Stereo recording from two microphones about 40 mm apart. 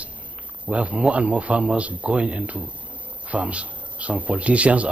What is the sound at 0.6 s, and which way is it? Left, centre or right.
Speech, right.